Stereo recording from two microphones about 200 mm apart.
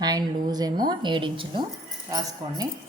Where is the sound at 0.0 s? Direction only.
20° right (ahead or behind).